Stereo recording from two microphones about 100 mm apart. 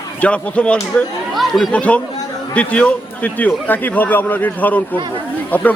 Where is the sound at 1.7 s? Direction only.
15° left (ahead or behind).